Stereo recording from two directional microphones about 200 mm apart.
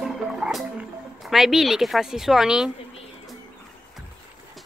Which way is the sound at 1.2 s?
Centre (ahead or behind).